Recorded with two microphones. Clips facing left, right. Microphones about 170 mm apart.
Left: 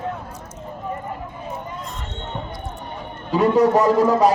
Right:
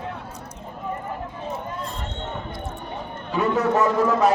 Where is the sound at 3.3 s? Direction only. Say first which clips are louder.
Left 6 dB; 35° left (ahead or behind).